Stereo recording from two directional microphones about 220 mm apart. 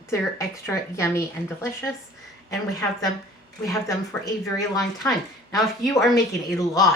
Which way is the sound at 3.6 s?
15° left (ahead or behind).